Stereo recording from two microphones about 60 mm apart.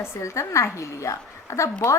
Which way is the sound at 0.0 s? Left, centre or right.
Left.